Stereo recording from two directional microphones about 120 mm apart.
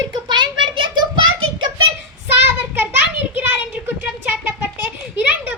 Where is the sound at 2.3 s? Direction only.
20° right (ahead or behind).